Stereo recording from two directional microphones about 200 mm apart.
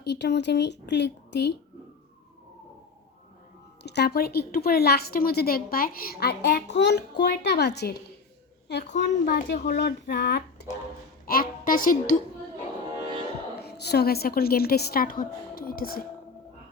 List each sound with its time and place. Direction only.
0.0 s speech: 60° left (ahead or behind)
3.8 s a woman's voice: 55° left (ahead or behind)
9.0 s a woman's voice: 50° left (ahead or behind)
11.3 s music: 45° left (ahead or behind)
13.6 s a woman's voice: 55° left (ahead or behind)